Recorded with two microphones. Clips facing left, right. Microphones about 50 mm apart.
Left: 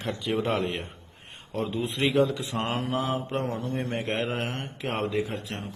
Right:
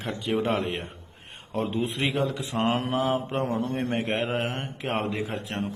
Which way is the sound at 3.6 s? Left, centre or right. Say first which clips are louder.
Right 3 dB; right.